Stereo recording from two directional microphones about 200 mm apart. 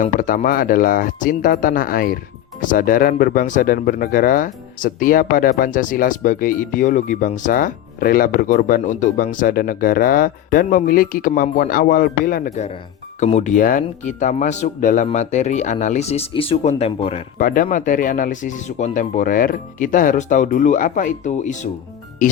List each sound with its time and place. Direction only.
0.0 s speech: 40° left (ahead or behind)